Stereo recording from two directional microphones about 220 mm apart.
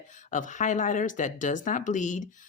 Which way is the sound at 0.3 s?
35° left (ahead or behind).